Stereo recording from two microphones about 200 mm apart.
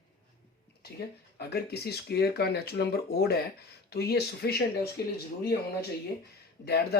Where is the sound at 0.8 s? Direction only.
50° left (ahead or behind).